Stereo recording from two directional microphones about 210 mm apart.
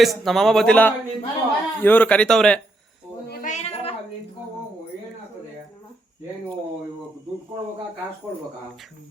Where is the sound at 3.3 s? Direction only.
35° left (ahead or behind).